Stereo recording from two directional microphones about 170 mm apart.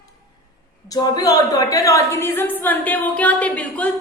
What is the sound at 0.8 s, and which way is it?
A woman's voice, 20° left (ahead or behind).